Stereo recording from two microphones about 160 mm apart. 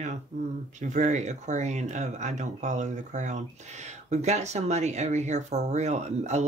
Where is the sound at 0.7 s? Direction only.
50° right (ahead or behind).